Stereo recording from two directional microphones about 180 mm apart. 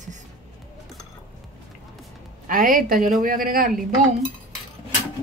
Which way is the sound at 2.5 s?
50° right (ahead or behind).